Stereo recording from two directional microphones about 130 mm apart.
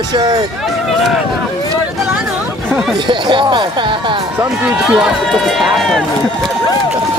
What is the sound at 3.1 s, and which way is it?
Speech, 40° right (ahead or behind).